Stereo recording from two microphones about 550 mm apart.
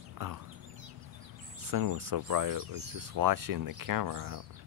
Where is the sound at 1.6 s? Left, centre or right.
Right.